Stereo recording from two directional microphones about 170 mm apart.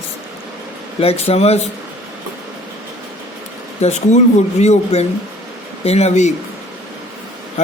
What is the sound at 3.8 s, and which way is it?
Speech, 40° left (ahead or behind).